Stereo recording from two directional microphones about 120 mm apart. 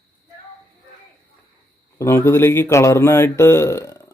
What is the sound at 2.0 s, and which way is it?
Speech, 20° left (ahead or behind).